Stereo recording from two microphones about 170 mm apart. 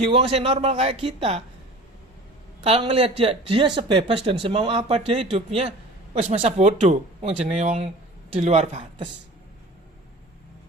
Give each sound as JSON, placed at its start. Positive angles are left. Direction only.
{"t": 0.1, "sound": "speech", "side_deg": -35}
{"t": 2.6, "sound": "speech", "side_deg": -30}
{"t": 6.2, "sound": "speech", "side_deg": -40}